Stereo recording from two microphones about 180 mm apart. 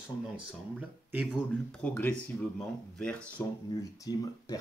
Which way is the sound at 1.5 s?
5° left (ahead or behind).